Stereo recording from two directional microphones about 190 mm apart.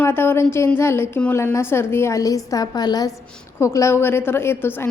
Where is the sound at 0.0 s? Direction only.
10° left (ahead or behind).